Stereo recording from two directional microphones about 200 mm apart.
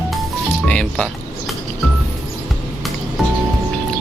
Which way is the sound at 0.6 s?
5° left (ahead or behind).